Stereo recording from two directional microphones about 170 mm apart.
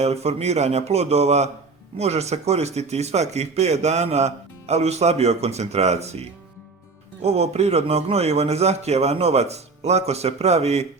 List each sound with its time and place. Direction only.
0.0 s speech: 40° right (ahead or behind)